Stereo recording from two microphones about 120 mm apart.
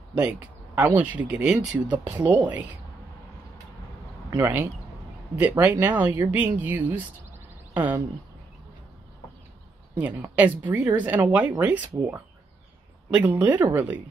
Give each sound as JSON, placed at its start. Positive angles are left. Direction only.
{"t": 0.1, "sound": "a sound", "side_deg": -10}
{"t": 0.9, "sound": "speech", "side_deg": -10}
{"t": 4.4, "sound": "speech", "side_deg": -15}
{"t": 9.9, "sound": "speech", "side_deg": -15}
{"t": 13.1, "sound": "speech", "side_deg": -20}